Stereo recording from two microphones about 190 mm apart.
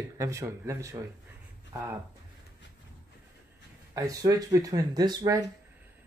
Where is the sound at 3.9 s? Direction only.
15° right (ahead or behind).